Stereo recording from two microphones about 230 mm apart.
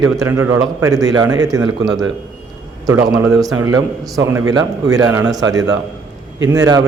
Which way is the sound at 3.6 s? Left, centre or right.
Centre.